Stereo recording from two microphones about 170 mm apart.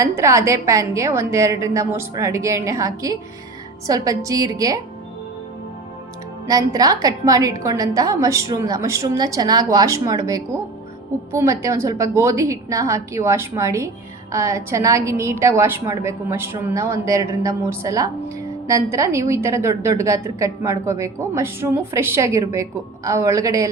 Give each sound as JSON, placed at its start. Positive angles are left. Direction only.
{"t": 0.0, "sound": "a woman's voice", "side_deg": -20}
{"t": 6.5, "sound": "a woman's voice", "side_deg": -20}